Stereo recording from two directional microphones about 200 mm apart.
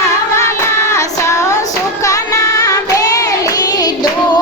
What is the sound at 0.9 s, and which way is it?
Child singing, 15° left (ahead or behind).